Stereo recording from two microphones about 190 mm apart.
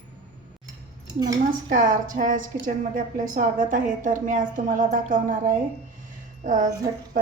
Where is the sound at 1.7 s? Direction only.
45° right (ahead or behind).